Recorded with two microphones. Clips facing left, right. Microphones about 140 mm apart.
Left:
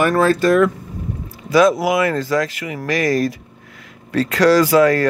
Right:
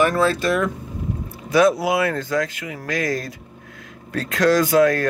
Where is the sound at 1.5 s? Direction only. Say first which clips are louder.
Left 3 dB; 90° left.